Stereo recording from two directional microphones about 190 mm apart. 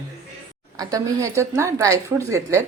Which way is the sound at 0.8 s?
20° right (ahead or behind).